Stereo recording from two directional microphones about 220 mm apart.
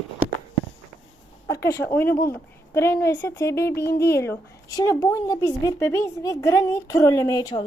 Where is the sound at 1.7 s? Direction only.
10° left (ahead or behind).